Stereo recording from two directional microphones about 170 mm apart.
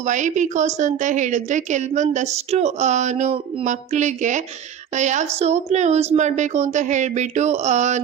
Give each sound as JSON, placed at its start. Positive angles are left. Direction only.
{"t": 0.0, "sound": "a woman's voice", "side_deg": -45}